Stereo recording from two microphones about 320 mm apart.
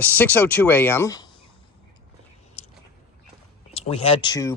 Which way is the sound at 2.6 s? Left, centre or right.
Left.